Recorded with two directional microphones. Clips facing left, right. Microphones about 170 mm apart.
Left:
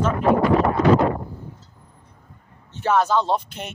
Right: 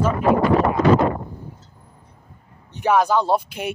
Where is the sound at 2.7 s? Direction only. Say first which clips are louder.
Right 2 dB; 15° right (ahead or behind).